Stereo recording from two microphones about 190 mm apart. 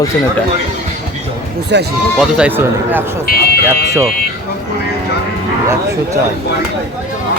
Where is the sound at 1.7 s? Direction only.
65° right (ahead or behind).